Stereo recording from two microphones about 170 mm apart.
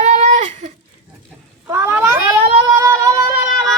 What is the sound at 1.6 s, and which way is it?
Cat, 15° right (ahead or behind).